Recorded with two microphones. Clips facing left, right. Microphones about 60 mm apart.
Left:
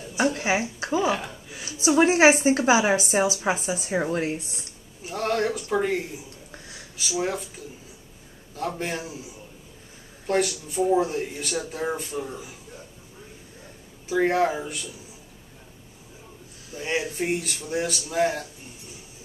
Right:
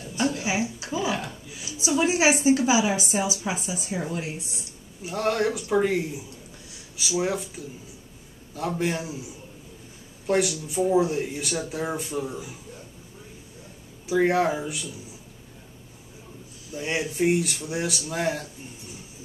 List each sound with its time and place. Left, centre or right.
0.2 s a woman's voice: left
5.0 s speech: centre
7.0 s speech: centre
10.2 s speech: centre
14.0 s speech: centre
16.7 s speech: centre